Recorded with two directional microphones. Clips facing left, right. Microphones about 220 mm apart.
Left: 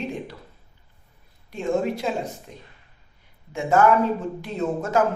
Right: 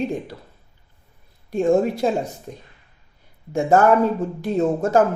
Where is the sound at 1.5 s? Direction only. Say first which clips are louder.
Right 6 dB; 45° right (ahead or behind).